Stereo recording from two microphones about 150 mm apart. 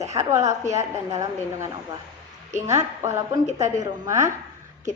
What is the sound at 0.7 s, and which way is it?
A woman's voice, 20° right (ahead or behind).